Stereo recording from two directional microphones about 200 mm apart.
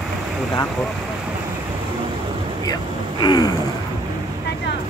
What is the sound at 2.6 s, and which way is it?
Speech, 20° left (ahead or behind).